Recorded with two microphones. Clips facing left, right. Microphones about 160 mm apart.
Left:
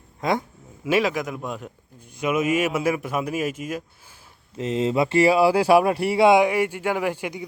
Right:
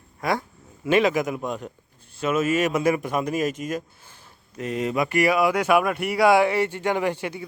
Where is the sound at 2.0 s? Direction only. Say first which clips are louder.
Even; 15° left (ahead or behind).